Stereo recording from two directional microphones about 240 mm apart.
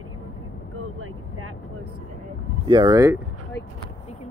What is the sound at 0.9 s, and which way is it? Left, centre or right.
Speech, right.